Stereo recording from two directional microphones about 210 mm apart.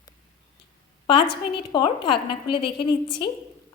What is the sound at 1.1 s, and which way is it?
A woman's voice, 25° left (ahead or behind).